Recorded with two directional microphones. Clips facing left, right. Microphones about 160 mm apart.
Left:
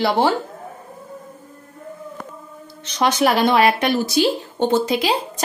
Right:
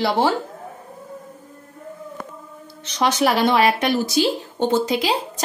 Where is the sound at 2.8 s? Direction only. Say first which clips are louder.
Left 1 dB; 55° left (ahead or behind).